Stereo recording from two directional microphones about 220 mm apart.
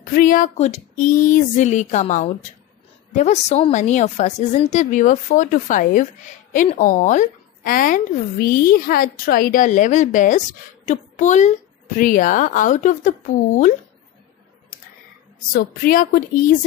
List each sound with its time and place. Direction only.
0.1 s a woman's voice: 40° left (ahead or behind)
15.5 s speech: 40° left (ahead or behind)